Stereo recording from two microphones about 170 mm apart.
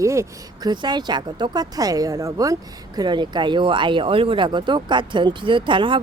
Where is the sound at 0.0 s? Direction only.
15° right (ahead or behind).